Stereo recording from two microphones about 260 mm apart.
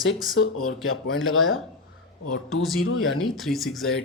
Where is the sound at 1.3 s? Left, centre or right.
Centre.